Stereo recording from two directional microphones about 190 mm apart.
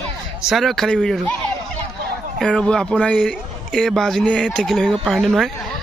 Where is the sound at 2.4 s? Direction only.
5° left (ahead or behind).